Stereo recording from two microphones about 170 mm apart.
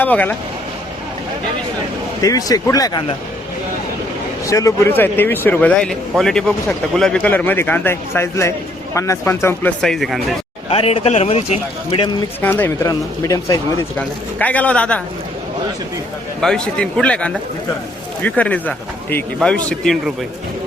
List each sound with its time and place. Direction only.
0.0 s speech: 10° left (ahead or behind)
2.2 s speech: 20° left (ahead or behind)
4.4 s speech: 20° left (ahead or behind)
9.8 s speech: centre (ahead or behind)
10.7 s a man's voice: 35° left (ahead or behind)
12.4 s speech: 10° left (ahead or behind)
14.3 s speech: 10° left (ahead or behind)
16.4 s speech: 5° left (ahead or behind)